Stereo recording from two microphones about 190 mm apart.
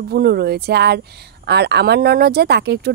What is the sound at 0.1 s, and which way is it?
Speech, 55° right (ahead or behind).